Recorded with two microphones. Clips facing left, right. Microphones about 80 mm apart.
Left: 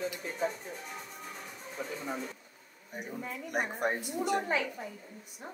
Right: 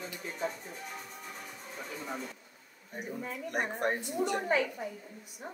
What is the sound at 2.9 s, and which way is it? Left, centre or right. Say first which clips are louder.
A woman's voice: right 1 dB; centre.